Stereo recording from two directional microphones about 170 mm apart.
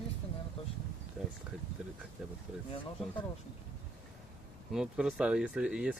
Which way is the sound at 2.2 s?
5° right (ahead or behind).